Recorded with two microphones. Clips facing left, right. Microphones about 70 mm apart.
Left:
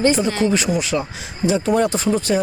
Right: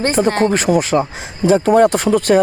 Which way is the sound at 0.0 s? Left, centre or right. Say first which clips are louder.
Right 3 dB; right.